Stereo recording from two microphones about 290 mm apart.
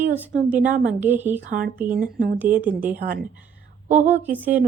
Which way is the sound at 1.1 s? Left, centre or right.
Centre.